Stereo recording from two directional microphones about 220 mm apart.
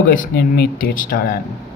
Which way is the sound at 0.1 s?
40° left (ahead or behind).